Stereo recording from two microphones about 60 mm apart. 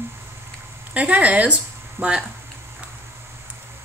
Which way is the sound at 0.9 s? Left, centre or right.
Right.